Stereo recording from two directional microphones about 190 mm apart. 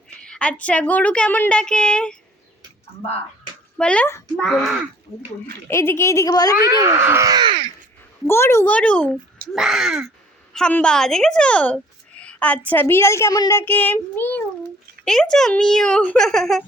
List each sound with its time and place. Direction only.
0.2 s a woman's voice: 5° left (ahead or behind)
3.8 s a woman's voice: 5° left (ahead or behind)
5.6 s a woman's voice: 15° left (ahead or behind)
6.6 s speech: 15° right (ahead or behind)
8.3 s a woman's voice: 15° left (ahead or behind)